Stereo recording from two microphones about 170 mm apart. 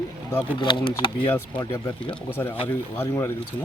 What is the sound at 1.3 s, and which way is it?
Speech, 15° left (ahead or behind).